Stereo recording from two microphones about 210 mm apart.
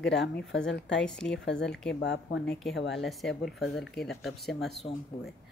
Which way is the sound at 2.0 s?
55° left (ahead or behind).